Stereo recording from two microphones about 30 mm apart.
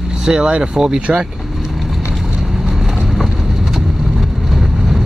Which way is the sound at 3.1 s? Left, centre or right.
Centre.